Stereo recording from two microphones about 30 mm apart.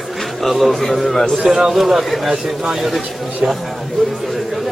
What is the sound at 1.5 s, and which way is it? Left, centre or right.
Speech, centre.